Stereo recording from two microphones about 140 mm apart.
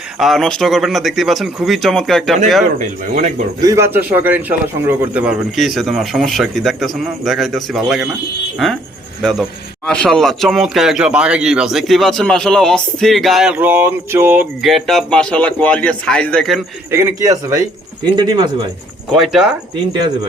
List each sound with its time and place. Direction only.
0.2 s a man's voice: centre (ahead or behind)
2.7 s speech: 65° right (ahead or behind)
3.6 s speech: 25° right (ahead or behind)
3.9 s a man's voice: 15° right (ahead or behind)
9.2 s a man's voice: centre (ahead or behind); by 14.4 s 15° right (ahead or behind)
14.6 s speech: centre (ahead or behind)
16.9 s speech: 20° right (ahead or behind)
18.2 s speech: 30° right (ahead or behind)
19.1 s a man's voice: centre (ahead or behind)